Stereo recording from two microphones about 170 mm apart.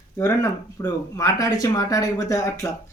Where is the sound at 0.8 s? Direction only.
20° left (ahead or behind).